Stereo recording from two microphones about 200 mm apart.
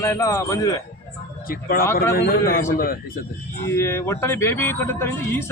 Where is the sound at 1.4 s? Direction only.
45° left (ahead or behind).